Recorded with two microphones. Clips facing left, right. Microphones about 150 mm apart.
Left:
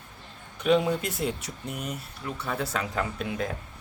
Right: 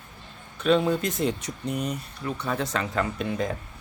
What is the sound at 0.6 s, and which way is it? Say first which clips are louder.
Speech: right 1 dB; 15° left (ahead or behind).